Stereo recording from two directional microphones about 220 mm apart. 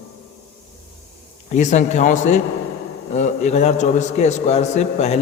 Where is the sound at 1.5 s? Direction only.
30° left (ahead or behind).